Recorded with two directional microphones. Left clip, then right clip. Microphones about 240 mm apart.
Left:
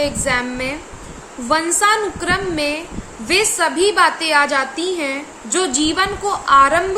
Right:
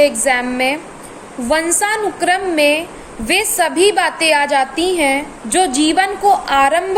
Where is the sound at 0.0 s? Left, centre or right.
Centre.